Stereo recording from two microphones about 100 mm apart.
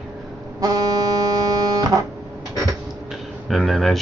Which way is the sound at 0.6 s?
40° right (ahead or behind).